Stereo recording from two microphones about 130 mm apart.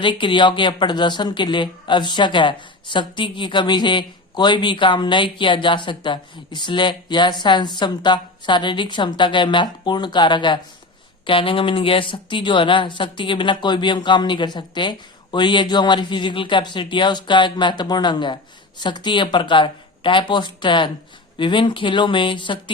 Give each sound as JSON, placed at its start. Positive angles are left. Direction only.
{"t": 0.0, "sound": "speech", "side_deg": 40}